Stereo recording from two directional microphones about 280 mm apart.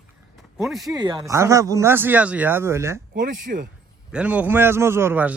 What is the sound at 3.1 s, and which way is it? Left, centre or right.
Speech, right.